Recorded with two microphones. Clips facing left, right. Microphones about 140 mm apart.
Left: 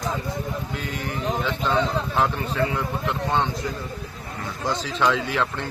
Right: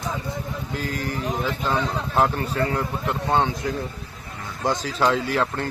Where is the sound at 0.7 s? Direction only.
40° right (ahead or behind).